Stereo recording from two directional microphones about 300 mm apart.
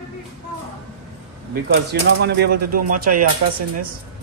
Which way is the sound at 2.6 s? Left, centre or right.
Right.